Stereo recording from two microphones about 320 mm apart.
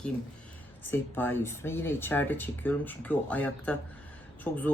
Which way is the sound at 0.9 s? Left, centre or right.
Centre.